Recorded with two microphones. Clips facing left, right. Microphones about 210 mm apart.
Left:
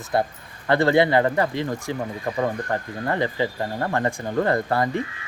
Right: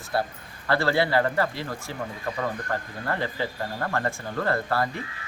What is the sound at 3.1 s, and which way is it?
Speech, 15° left (ahead or behind).